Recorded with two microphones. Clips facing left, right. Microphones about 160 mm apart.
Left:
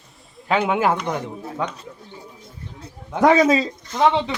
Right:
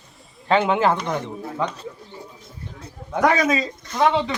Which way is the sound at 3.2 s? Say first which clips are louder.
Left 4 dB; 30° left (ahead or behind).